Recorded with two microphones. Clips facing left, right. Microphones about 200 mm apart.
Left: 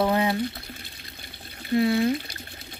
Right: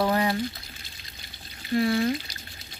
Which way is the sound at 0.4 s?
60° left (ahead or behind).